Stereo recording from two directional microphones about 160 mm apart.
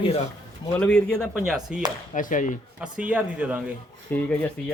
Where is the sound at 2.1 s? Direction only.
55° left (ahead or behind).